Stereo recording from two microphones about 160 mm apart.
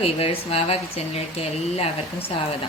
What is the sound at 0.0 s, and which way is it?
A woman's voice, 40° left (ahead or behind).